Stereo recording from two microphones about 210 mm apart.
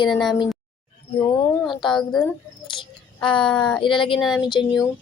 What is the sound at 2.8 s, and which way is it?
Child singing, 25° left (ahead or behind).